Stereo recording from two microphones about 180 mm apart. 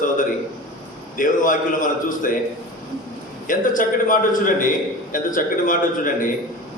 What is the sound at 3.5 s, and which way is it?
A man's voice, 50° left (ahead or behind).